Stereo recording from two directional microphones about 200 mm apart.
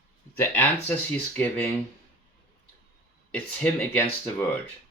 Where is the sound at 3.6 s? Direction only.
10° left (ahead or behind).